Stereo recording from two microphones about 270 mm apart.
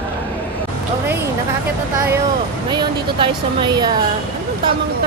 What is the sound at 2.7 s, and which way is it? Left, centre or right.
Speech, centre.